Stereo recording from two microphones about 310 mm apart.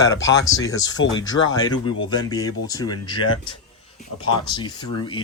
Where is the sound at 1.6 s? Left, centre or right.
Centre.